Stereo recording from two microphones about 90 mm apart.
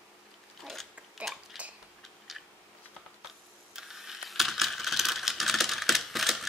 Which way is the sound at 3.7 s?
5° right (ahead or behind).